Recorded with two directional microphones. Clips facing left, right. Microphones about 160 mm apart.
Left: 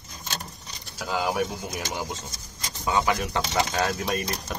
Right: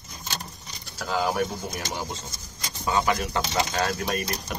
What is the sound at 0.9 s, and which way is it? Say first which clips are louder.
Speech: right 1 dB; 5° left (ahead or behind).